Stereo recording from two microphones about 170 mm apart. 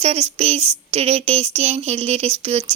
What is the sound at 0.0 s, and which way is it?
Speech, 40° right (ahead or behind).